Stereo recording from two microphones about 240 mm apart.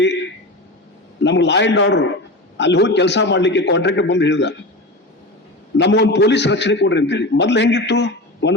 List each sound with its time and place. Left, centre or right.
1.2 s a man's voice: left
5.7 s a man's voice: left